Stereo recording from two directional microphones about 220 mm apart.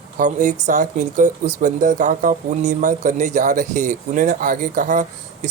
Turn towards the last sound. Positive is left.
turn(degrees=-35)  # may be behind; listen again after turning